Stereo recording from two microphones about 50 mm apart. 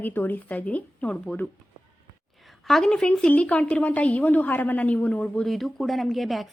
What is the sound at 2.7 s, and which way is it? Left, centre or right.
Speech, centre.